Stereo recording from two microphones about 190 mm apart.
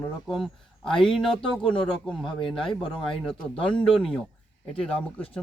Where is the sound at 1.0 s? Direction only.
25° left (ahead or behind).